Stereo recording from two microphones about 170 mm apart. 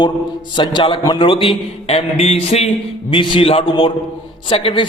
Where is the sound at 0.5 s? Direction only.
30° left (ahead or behind).